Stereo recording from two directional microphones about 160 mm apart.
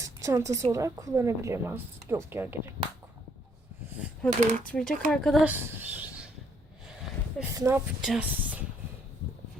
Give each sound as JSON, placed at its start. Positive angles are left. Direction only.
{"t": 0.0, "sound": "a sound", "side_deg": -20}
{"t": 0.6, "sound": "a woman's voice", "side_deg": -20}
{"t": 4.3, "sound": "speech", "side_deg": -50}
{"t": 4.7, "sound": "speech", "side_deg": 5}
{"t": 5.5, "sound": "a sound", "side_deg": -10}
{"t": 7.5, "sound": "speech", "side_deg": -20}
{"t": 8.0, "sound": "speech", "side_deg": -5}